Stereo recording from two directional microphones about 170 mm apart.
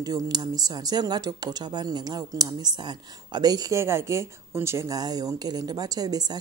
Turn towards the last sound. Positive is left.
turn(degrees=-25)  # may be behind; listen again after turning